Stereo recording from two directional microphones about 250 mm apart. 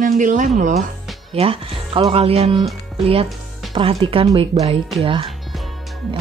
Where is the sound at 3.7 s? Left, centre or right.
Right.